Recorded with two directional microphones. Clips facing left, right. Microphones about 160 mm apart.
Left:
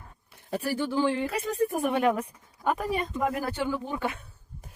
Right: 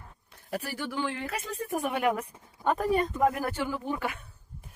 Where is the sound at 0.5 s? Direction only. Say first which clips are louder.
Left 6 dB; 30° left (ahead or behind).